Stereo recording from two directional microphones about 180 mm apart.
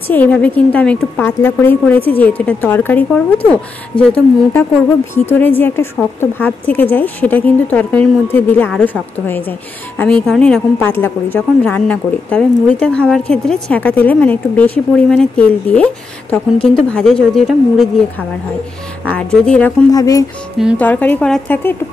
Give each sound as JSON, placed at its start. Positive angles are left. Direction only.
{"t": 0.1, "sound": "a woman's voice", "side_deg": 10}
{"t": 19.1, "sound": "a woman's voice", "side_deg": 5}
{"t": 19.9, "sound": "speech", "side_deg": 20}
{"t": 20.7, "sound": "a woman's voice", "side_deg": 10}